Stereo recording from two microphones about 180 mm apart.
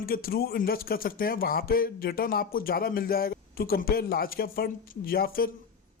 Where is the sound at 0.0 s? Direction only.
55° left (ahead or behind).